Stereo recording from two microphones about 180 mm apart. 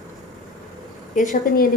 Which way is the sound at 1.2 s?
45° left (ahead or behind).